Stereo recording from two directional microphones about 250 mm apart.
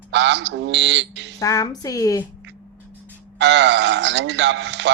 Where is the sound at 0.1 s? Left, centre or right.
Right.